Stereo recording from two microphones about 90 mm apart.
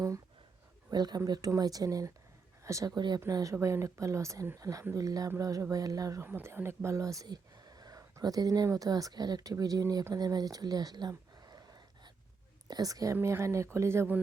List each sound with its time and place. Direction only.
0.9 s speech: 50° right (ahead or behind)
2.9 s speech: 55° right (ahead or behind)
3.2 s speech: 35° right (ahead or behind)
6.2 s speech: 25° right (ahead or behind)
10.2 s speech: 45° right (ahead or behind)
11.1 s a sound: 45° right (ahead or behind)
12.6 s speech: 45° right (ahead or behind); by 14.2 s 30° right (ahead or behind)